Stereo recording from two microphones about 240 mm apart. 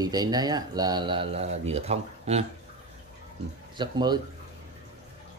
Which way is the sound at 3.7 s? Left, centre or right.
Centre.